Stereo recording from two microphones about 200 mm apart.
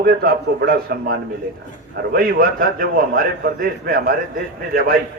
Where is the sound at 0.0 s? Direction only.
50° right (ahead or behind).